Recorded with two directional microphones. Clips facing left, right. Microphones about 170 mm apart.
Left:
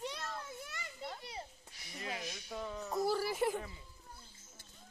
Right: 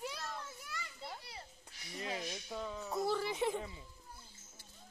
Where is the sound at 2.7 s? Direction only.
Centre (ahead or behind).